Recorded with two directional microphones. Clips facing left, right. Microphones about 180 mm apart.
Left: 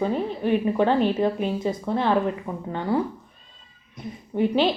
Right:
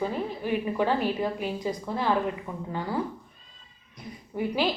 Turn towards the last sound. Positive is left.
turn(degrees=25)  # may be behind; listen again after turning